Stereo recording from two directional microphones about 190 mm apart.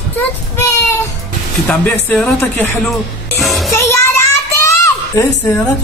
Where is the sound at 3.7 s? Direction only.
15° left (ahead or behind).